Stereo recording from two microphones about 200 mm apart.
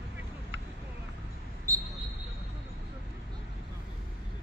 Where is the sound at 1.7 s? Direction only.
15° right (ahead or behind).